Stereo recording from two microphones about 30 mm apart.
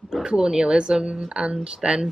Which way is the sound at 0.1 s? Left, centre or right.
Right.